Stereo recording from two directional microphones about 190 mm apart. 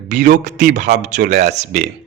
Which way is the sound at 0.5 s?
65° right (ahead or behind).